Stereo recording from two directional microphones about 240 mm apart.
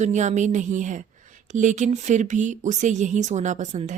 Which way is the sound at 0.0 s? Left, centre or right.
Right.